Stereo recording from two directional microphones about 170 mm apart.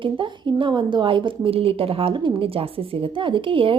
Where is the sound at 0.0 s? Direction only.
30° right (ahead or behind).